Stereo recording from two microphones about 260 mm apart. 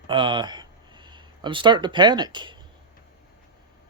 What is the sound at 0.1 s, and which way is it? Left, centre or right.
Speech, centre.